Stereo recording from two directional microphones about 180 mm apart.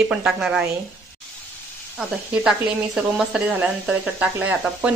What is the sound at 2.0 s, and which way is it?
Speech, 5° right (ahead or behind).